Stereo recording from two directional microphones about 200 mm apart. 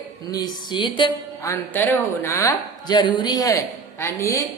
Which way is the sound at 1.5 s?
10° left (ahead or behind).